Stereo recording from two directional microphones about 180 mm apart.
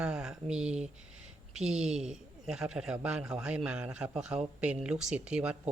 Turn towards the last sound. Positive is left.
turn(degrees=-5)  # may be behind; listen again after turning